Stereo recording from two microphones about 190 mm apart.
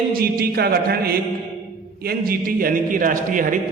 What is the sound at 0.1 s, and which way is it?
A man's voice, 50° right (ahead or behind).